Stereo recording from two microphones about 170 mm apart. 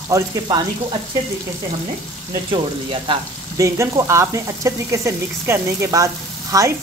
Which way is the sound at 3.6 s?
20° right (ahead or behind).